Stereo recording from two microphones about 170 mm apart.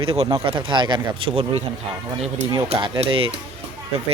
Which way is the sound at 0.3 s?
25° right (ahead or behind).